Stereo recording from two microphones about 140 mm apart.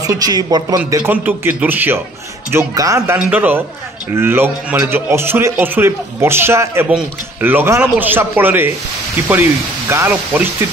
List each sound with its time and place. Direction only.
0.0 s speech: 25° right (ahead or behind)
1.1 s a man's voice: 15° right (ahead or behind)
3.3 s a man's voice: 15° right (ahead or behind)
9.8 s a man's voice: 15° right (ahead or behind)